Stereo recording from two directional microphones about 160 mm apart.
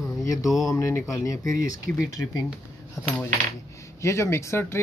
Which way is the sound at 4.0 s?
15° left (ahead or behind).